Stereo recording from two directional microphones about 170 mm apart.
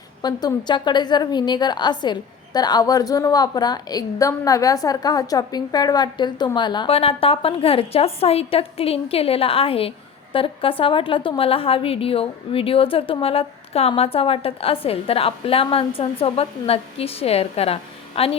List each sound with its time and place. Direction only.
0.2 s a woman's voice: 25° left (ahead or behind)